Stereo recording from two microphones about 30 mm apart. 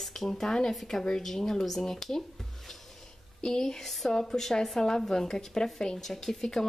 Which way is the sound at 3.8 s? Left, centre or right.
Centre.